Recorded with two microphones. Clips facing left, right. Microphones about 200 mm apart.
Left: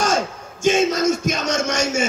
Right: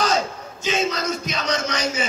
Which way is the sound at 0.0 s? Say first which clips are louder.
Left 1 dB; 45° left (ahead or behind).